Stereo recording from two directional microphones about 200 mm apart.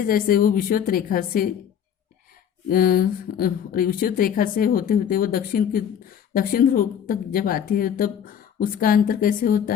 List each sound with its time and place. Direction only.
0.1 s speech: 45° left (ahead or behind)
2.6 s speech: 45° left (ahead or behind)